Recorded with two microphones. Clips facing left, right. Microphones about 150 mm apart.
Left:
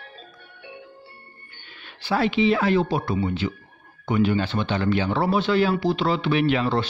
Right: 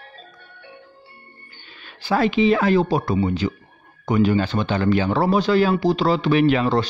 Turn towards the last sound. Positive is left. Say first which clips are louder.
# right 4 dB
turn(degrees=-40)  # may be behind; listen again after turning